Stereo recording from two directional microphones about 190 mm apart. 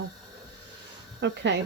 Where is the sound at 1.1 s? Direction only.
70° right (ahead or behind).